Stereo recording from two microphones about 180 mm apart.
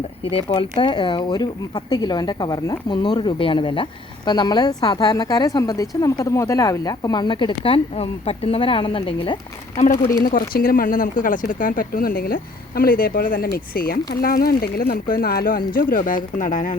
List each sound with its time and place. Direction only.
0.3 s speech: 30° left (ahead or behind)
10.2 s speech: 55° left (ahead or behind)